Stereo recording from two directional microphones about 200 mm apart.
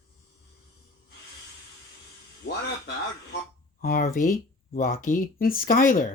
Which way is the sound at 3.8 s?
45° left (ahead or behind).